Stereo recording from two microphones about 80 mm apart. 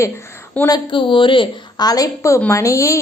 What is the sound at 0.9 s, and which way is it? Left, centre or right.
Speech, left.